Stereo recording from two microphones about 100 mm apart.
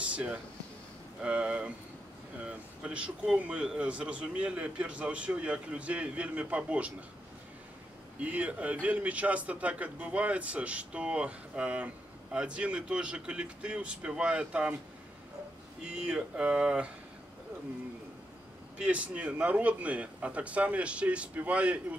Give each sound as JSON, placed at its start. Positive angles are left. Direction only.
{"t": 0.0, "sound": "a sound", "side_deg": -10}
{"t": 1.2, "sound": "a man's voice", "side_deg": -10}
{"t": 8.2, "sound": "a man's voice", "side_deg": -15}
{"t": 15.9, "sound": "a man's voice", "side_deg": -10}
{"t": 18.8, "sound": "a man's voice", "side_deg": -15}